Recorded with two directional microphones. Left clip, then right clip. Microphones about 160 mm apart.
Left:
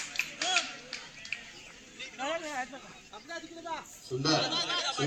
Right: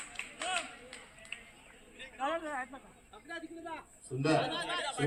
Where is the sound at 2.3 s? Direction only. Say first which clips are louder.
Left 1 dB; 55° left (ahead or behind).